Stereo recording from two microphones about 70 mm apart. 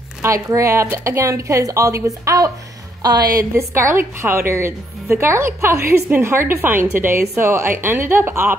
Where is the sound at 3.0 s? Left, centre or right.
Right.